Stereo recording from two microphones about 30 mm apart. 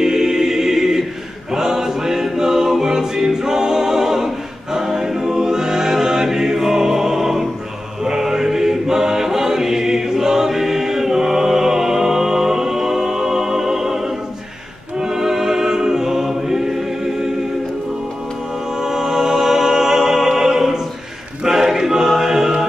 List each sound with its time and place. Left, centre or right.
0.0 s choir: centre
4.7 s music: centre
8.0 s chant: centre
15.0 s music: centre
18.8 s music: centre
21.5 s choir: centre